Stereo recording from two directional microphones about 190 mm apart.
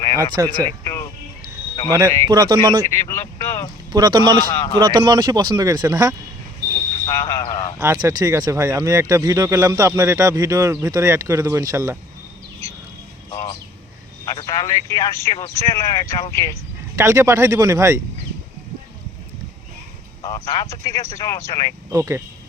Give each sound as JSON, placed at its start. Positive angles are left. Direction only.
{"t": 0.2, "sound": "speech", "side_deg": -20}
{"t": 0.6, "sound": "music", "side_deg": 15}
{"t": 2.0, "sound": "speech", "side_deg": 15}
{"t": 2.3, "sound": "speech", "side_deg": -20}
{"t": 2.8, "sound": "speech", "side_deg": 15}
{"t": 3.9, "sound": "speech", "side_deg": -20}
{"t": 7.0, "sound": "speech", "side_deg": 15}
{"t": 7.8, "sound": "speech", "side_deg": -15}
{"t": 13.3, "sound": "a sound", "side_deg": 20}
{"t": 14.3, "sound": "speech", "side_deg": 20}
{"t": 16.9, "sound": "speech", "side_deg": -15}
{"t": 20.2, "sound": "speech", "side_deg": 15}
{"t": 21.8, "sound": "speech", "side_deg": -15}